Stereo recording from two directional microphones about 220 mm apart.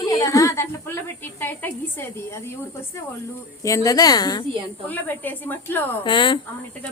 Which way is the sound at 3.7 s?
15° left (ahead or behind).